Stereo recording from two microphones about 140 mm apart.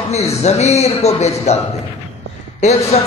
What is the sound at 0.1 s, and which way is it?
A man's voice, 50° left (ahead or behind).